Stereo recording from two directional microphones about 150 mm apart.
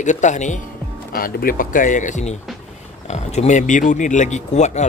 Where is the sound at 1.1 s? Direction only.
75° left (ahead or behind).